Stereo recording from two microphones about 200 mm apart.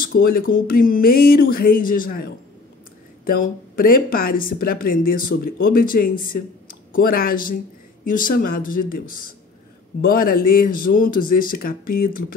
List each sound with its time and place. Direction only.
0.0 s speech: 45° left (ahead or behind)